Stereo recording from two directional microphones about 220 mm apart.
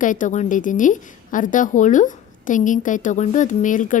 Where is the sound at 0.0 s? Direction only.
35° left (ahead or behind).